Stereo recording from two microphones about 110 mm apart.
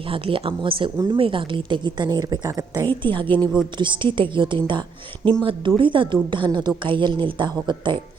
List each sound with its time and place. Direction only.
0.1 s speech: 55° right (ahead or behind); by 2.9 s 35° right (ahead or behind)
3.0 s speech: 45° right (ahead or behind)
3.2 s a woman's voice: 15° left (ahead or behind)
3.8 s speech: 50° right (ahead or behind)